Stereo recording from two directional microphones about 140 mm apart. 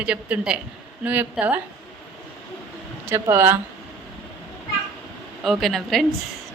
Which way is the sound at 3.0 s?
20° right (ahead or behind).